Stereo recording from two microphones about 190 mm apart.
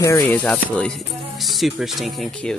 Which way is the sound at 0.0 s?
10° left (ahead or behind).